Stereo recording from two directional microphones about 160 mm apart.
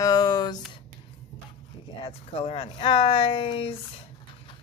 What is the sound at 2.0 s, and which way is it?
Speech, 35° left (ahead or behind).